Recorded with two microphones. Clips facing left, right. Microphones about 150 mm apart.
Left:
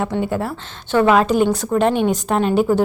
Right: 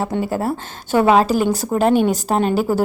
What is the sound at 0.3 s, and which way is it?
Speech, 40° right (ahead or behind).